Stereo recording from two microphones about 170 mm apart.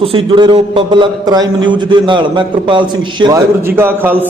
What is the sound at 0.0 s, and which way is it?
A man's voice, 35° right (ahead or behind).